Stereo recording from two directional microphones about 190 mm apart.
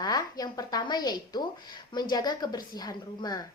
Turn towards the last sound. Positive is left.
turn(degrees=20)  # may be behind; listen again after turning